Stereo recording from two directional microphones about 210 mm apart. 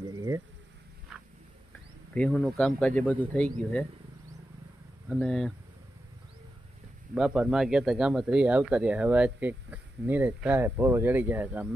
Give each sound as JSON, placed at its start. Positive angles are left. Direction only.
{"t": 0.1, "sound": "insect", "side_deg": -15}
{"t": 2.1, "sound": "speech", "side_deg": 5}
{"t": 5.1, "sound": "speech", "side_deg": 5}
{"t": 7.2, "sound": "speech", "side_deg": -5}